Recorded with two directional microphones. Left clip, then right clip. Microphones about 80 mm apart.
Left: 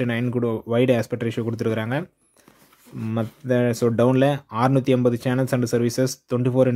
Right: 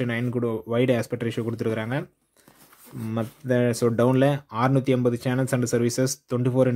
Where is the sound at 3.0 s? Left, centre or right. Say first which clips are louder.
Left 2 dB; centre.